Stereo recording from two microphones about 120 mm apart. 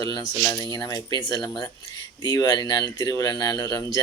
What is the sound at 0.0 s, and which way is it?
Speech, 35° left (ahead or behind).